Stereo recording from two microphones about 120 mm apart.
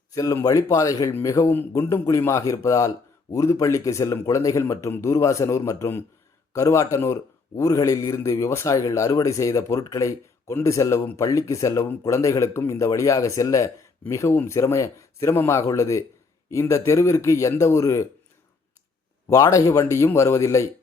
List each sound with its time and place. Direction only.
0.1 s a man's voice: 30° left (ahead or behind)
19.3 s a man's voice: 25° left (ahead or behind)